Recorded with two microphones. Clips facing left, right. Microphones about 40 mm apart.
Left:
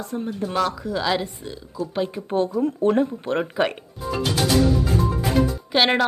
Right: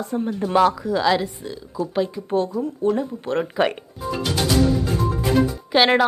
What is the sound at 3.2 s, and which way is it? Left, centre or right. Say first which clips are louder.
Speech: right 1 dB; centre.